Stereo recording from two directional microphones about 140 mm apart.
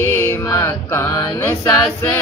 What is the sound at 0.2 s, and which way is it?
Mantra, 20° left (ahead or behind).